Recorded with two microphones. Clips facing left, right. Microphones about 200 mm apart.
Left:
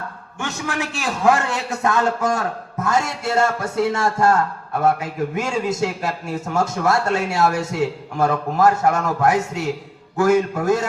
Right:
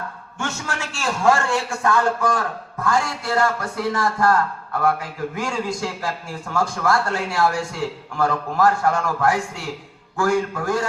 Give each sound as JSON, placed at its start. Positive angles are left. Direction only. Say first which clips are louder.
{"t": 0.3, "sound": "a man's voice", "louder": "left 3 dB", "side_deg": 15}